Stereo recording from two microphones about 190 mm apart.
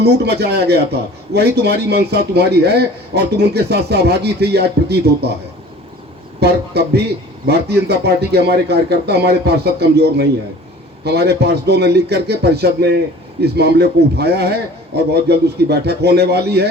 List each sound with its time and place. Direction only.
0.0 s a man's voice: 60° right (ahead or behind)
6.4 s a man's voice: 60° right (ahead or behind)